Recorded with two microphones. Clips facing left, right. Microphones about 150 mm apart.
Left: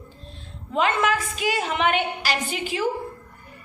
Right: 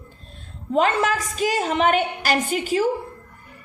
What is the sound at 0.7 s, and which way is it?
A woman's voice, 40° right (ahead or behind).